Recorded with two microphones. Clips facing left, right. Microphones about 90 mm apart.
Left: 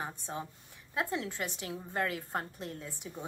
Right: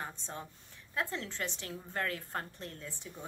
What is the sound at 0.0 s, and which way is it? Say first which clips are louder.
A woman's voice: left 3 dB; 10° left (ahead or behind).